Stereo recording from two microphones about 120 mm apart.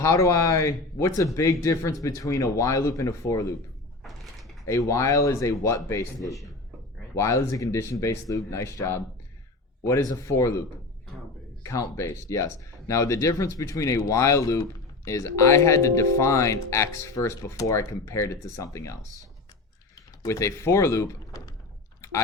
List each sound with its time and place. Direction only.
0.0 s speech: 25° left (ahead or behind)
4.0 s a sound: centre (ahead or behind)
4.6 s speech: 25° left (ahead or behind)
7.2 s speech: 25° left (ahead or behind)
11.6 s speech: 25° left (ahead or behind)